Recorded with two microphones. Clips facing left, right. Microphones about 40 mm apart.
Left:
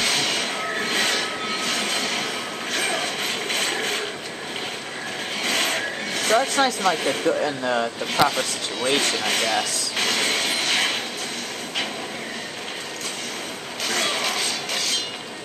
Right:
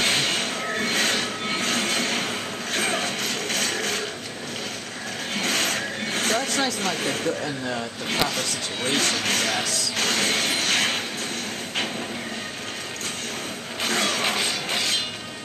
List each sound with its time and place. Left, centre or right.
0.0 s a sound: right
0.6 s a sound: left
2.0 s a sound: right
3.0 s music: left
5.4 s a sound: left
6.2 s speech: left
6.6 s speech: left
7.4 s speech: left
8.2 s speech: left
8.8 s speech: left
9.9 s train: left
14.2 s music: right